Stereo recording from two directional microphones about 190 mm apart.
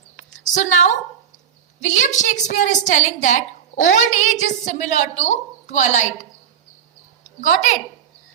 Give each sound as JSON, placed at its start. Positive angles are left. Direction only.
{"t": 0.5, "sound": "a woman's voice", "side_deg": 40}
{"t": 7.4, "sound": "a woman's voice", "side_deg": 40}